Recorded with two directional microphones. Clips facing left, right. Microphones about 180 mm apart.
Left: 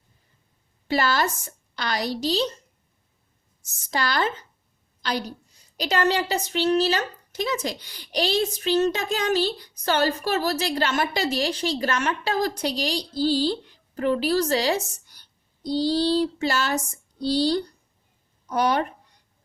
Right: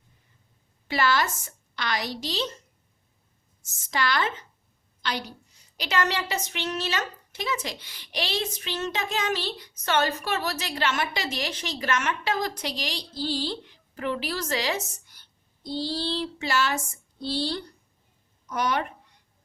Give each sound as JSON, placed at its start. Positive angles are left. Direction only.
{"t": 0.9, "sound": "a woman's voice", "side_deg": 40}
{"t": 3.8, "sound": "a woman's voice", "side_deg": 35}